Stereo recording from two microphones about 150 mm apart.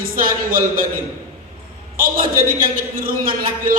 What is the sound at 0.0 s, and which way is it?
Speech, 70° right (ahead or behind).